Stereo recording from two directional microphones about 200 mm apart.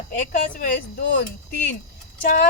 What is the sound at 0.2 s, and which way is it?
Speech, 45° left (ahead or behind).